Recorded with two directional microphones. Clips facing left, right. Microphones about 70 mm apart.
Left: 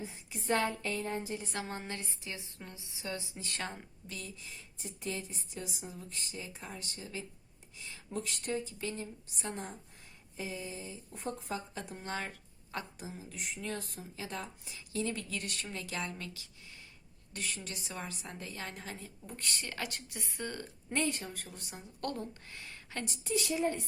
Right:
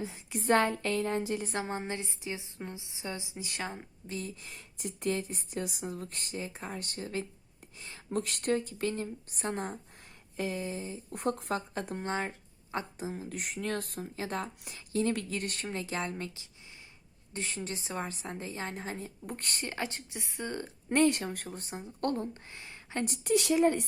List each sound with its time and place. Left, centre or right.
0.0 s a woman's voice: right
1.5 s speech: right
4.0 s speech: right
4.4 s speech: right
10.3 s speech: right
11.1 s a woman's voice: right
11.7 s speech: right
12.0 s speech: right
19.7 s speech: right
20.9 s speech: right
21.6 s speech: right
23.0 s a woman's voice: right